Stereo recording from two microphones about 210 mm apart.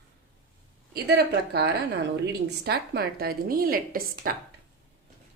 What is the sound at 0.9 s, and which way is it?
A woman's voice, 55° right (ahead or behind).